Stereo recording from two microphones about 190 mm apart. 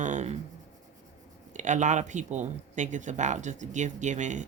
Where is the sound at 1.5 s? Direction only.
40° right (ahead or behind).